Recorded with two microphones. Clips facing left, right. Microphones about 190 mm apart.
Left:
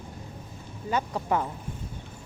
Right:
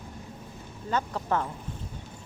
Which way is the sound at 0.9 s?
15° left (ahead or behind).